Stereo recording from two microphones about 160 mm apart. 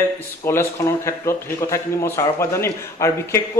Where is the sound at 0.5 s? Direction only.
15° left (ahead or behind).